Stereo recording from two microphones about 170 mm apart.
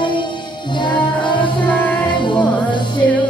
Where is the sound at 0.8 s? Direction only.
25° left (ahead or behind).